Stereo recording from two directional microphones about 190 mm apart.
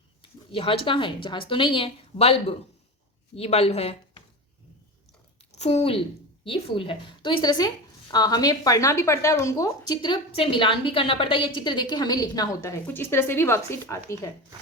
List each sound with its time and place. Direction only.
0.2 s a woman's voice: 30° left (ahead or behind)
5.5 s a woman's voice: 35° left (ahead or behind); by 14.4 s 15° left (ahead or behind)